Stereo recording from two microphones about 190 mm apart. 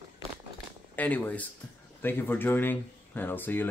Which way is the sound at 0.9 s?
10° left (ahead or behind).